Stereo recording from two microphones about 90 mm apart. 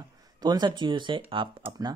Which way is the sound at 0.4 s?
50° right (ahead or behind).